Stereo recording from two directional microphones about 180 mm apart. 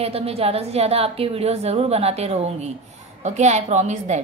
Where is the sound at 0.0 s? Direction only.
35° right (ahead or behind).